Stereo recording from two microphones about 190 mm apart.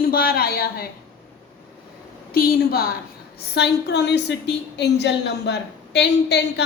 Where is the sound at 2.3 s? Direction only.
50° left (ahead or behind).